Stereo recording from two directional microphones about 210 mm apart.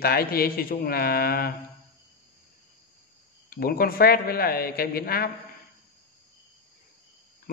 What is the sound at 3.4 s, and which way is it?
Speech, 45° left (ahead or behind).